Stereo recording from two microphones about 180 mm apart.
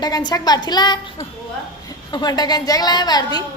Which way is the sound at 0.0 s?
25° left (ahead or behind).